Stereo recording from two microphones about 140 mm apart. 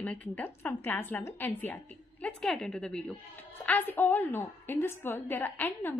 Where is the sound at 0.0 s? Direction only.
10° left (ahead or behind).